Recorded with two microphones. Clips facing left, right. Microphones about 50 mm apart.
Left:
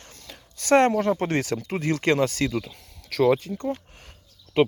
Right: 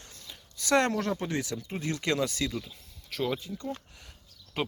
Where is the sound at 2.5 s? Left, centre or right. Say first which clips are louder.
Left 8 dB; left.